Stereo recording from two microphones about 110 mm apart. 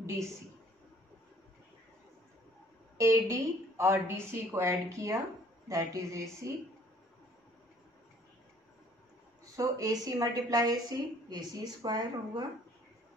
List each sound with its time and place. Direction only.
0.0 s a woman's voice: 30° right (ahead or behind)
3.0 s a woman's voice: 25° right (ahead or behind)
9.6 s a woman's voice: 30° right (ahead or behind)